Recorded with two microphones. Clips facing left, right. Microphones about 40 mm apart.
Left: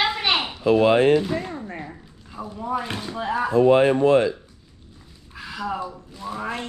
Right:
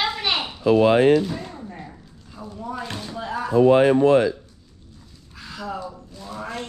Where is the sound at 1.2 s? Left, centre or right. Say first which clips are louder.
Left 2 dB; left.